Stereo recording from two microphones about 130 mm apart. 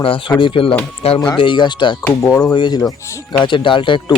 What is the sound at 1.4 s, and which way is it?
Speech, 35° left (ahead or behind).